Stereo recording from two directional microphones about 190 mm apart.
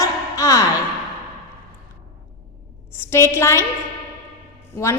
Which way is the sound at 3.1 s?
15° left (ahead or behind).